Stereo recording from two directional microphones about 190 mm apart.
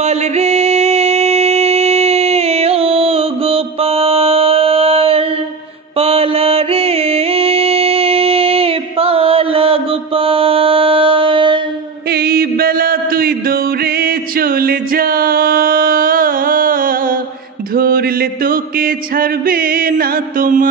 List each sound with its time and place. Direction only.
0.0 s music: 35° right (ahead or behind)
12.1 s music: 55° right (ahead or behind)
17.7 s chant: 50° right (ahead or behind)